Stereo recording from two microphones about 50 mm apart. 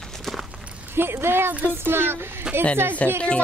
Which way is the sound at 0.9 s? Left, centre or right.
Right.